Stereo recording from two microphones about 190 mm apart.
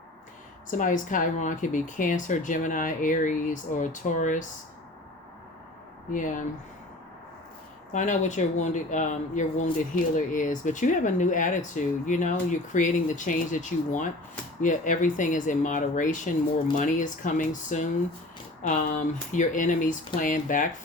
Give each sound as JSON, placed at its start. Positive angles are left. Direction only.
{"t": 0.7, "sound": "speech", "side_deg": 45}
{"t": 6.1, "sound": "speech", "side_deg": 45}
{"t": 7.9, "sound": "speech", "side_deg": 40}